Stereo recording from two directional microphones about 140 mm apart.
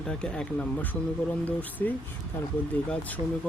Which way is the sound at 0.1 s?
5° left (ahead or behind).